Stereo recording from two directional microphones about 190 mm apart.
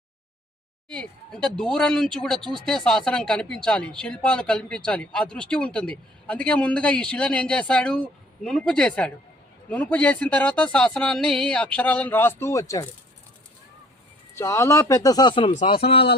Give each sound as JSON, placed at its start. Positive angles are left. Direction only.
{"t": 0.9, "sound": "speech", "side_deg": 5}
{"t": 14.3, "sound": "speech", "side_deg": 15}